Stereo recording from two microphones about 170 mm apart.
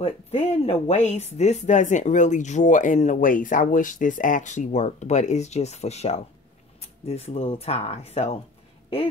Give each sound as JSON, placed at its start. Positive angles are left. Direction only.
{"t": 0.0, "sound": "speech", "side_deg": 40}